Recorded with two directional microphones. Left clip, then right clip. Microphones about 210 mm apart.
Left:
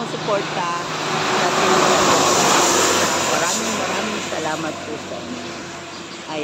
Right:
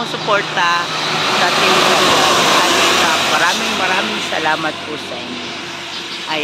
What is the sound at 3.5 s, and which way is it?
Speech, 55° left (ahead or behind).